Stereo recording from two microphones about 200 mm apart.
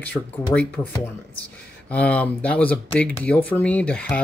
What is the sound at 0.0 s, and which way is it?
Speech, 10° left (ahead or behind).